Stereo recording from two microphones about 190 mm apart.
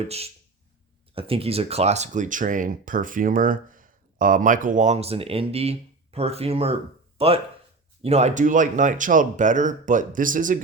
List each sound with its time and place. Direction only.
1.1 s speech: 30° right (ahead or behind)